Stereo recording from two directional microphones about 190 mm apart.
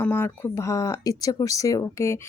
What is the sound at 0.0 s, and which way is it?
Speech, 10° left (ahead or behind).